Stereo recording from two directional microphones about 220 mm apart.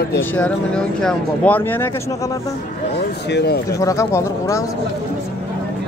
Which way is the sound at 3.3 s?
45° left (ahead or behind).